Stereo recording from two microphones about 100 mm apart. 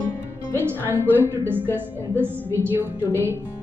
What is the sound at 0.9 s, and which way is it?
Music, 20° right (ahead or behind).